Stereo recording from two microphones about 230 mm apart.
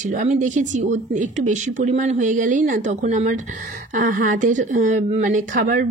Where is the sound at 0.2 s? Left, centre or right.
Right.